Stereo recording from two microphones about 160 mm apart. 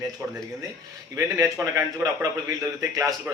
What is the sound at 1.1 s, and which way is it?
A man's voice, 20° right (ahead or behind).